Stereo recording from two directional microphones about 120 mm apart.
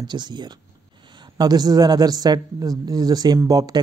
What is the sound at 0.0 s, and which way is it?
Speech, 40° right (ahead or behind).